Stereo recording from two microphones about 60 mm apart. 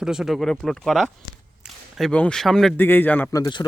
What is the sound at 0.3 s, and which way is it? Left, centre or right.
Speech, centre.